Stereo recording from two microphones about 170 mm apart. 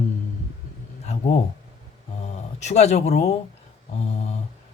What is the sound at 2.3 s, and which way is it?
Speech, 40° left (ahead or behind).